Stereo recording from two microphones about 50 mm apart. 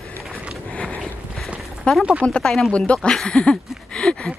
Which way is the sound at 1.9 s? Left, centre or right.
Left.